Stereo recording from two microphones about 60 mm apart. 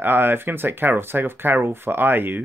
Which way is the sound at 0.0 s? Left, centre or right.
Right.